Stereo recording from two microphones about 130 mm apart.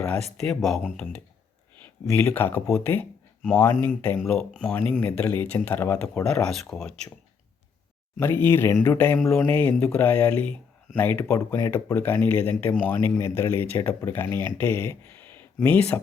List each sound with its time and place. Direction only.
0.3 s speech: centre (ahead or behind)
2.1 s speech: 15° left (ahead or behind)
4.2 s speech: 5° left (ahead or behind)
4.7 s speech: 15° left (ahead or behind)
6.2 s speech: 5° left (ahead or behind)
8.2 s speech: 15° left (ahead or behind)